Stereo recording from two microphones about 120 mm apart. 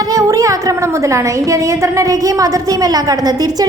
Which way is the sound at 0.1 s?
30° right (ahead or behind).